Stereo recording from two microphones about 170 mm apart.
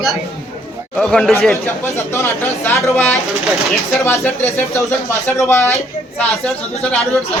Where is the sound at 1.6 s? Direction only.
15° left (ahead or behind).